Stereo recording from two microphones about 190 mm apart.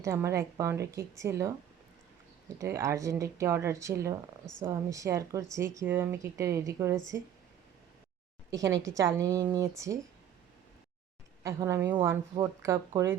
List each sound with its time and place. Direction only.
0.0 s speech: 15° right (ahead or behind)
2.6 s speech: 15° right (ahead or behind)
8.4 s a woman's voice: 15° right (ahead or behind)
11.4 s speech: 15° right (ahead or behind)